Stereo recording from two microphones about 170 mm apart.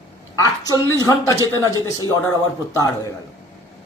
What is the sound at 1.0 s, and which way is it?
A man's voice, 20° left (ahead or behind).